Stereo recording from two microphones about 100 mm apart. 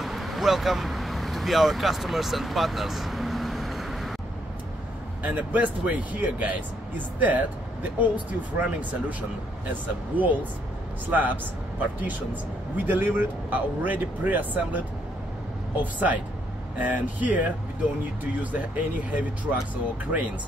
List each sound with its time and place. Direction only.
0.0 s vehicle: centre (ahead or behind)
5.2 s speech: 15° right (ahead or behind)